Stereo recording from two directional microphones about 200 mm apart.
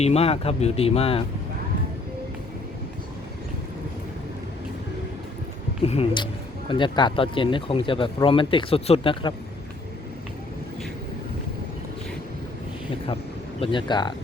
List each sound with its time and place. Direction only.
0.0 s speech: 30° left (ahead or behind)
5.8 s speech: 30° left (ahead or behind)
13.6 s speech: 25° left (ahead or behind)